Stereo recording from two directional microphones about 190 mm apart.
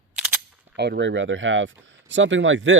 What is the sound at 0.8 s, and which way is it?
Speech, 65° right (ahead or behind).